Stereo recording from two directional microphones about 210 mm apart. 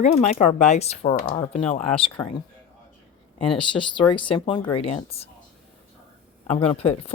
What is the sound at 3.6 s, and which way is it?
Speech, 25° left (ahead or behind).